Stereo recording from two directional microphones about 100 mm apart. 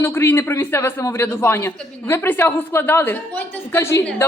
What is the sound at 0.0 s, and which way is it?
A woman's voice, 25° left (ahead or behind).